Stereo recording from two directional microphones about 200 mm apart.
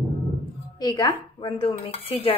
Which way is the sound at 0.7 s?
20° left (ahead or behind).